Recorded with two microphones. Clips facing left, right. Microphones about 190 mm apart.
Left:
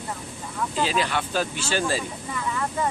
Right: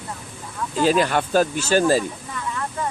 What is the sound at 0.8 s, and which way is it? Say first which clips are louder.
Speech: right 8 dB; 45° right (ahead or behind).